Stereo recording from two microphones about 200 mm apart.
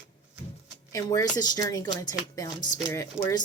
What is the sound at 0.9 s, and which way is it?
Speech, 15° left (ahead or behind).